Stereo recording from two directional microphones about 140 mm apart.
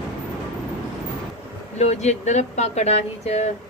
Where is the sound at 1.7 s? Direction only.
55° left (ahead or behind).